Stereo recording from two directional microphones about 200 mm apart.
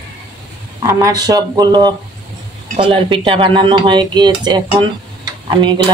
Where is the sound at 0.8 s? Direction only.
15° right (ahead or behind).